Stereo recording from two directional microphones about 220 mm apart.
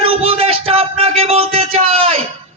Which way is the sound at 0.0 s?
25° right (ahead or behind).